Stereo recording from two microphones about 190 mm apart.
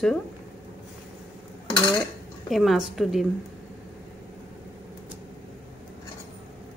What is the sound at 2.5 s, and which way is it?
Speech, centre (ahead or behind).